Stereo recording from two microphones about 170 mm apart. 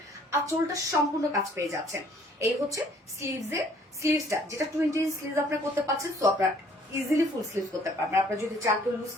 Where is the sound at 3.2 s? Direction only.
15° right (ahead or behind).